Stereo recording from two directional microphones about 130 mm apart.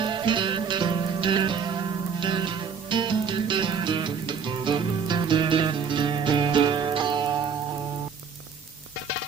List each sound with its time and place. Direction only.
0.0 s music: 40° right (ahead or behind)